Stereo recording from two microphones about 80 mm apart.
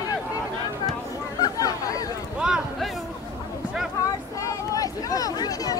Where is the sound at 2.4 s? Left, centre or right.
Centre.